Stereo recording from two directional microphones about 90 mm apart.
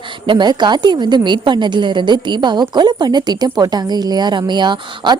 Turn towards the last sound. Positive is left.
turn(degrees=-55)  # may be behind; listen again after turning